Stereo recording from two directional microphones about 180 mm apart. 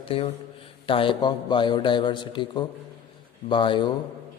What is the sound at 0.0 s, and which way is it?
A man's voice, 30° left (ahead or behind).